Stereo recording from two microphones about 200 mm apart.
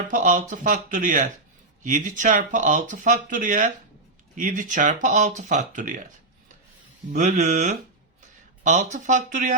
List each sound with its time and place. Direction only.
0.1 s speech: 40° right (ahead or behind)
7.1 s speech: 40° right (ahead or behind)